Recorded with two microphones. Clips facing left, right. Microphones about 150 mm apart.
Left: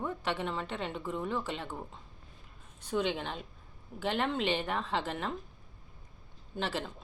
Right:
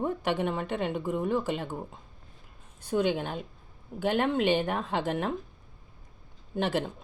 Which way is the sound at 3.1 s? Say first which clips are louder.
Right 5 dB; 50° right (ahead or behind).